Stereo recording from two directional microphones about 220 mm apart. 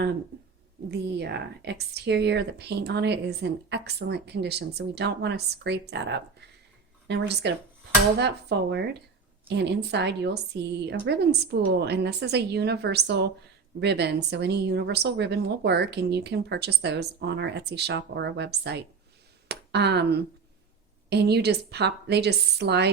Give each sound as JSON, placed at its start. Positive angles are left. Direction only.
{"t": 0.9, "sound": "a woman's voice", "side_deg": -50}